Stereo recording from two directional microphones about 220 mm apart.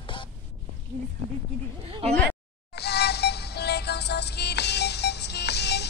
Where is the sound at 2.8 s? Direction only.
50° left (ahead or behind).